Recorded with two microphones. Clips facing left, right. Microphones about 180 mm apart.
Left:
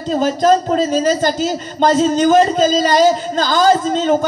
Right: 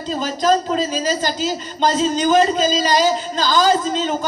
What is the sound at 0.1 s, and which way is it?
A man's voice, 50° left (ahead or behind).